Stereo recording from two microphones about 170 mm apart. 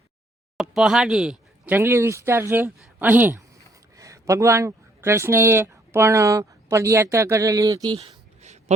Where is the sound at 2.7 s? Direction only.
Centre (ahead or behind); by 7.9 s 20° right (ahead or behind).